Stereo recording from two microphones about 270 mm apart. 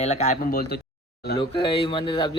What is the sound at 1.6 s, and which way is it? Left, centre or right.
Speech, centre.